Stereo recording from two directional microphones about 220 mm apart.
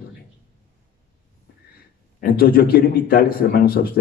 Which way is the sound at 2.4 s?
45° left (ahead or behind).